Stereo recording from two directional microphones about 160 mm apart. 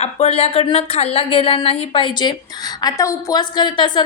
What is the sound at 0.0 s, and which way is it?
A woman's voice, 40° left (ahead or behind).